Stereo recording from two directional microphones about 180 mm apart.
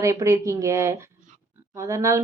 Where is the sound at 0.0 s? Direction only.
15° right (ahead or behind).